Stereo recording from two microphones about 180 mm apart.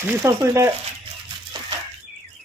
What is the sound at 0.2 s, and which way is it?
Speech, 15° right (ahead or behind).